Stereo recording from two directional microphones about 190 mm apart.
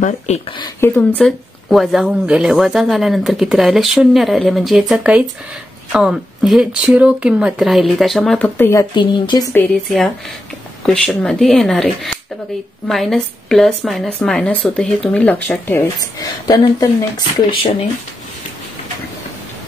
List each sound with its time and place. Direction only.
0.0 s speech: 35° left (ahead or behind)
0.6 s speech: 15° left (ahead or behind)
8.9 s speech: 25° left (ahead or behind)
9.5 s speech: 10° left (ahead or behind)